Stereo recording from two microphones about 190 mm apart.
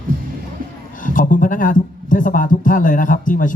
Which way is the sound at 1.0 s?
45° left (ahead or behind).